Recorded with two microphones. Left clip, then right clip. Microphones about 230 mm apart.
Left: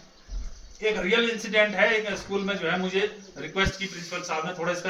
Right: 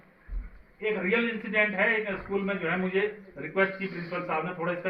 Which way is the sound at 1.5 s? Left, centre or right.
Centre.